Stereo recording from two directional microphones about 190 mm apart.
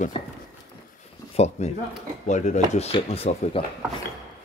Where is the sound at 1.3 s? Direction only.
35° left (ahead or behind).